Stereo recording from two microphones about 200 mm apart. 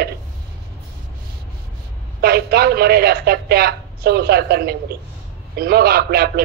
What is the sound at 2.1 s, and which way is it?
A woman's voice, 50° right (ahead or behind).